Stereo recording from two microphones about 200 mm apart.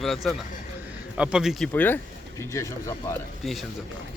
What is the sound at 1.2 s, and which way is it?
Speech, 5° right (ahead or behind).